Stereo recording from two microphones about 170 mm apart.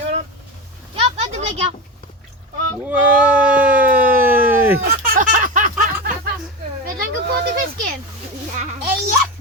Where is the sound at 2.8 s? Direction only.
10° right (ahead or behind).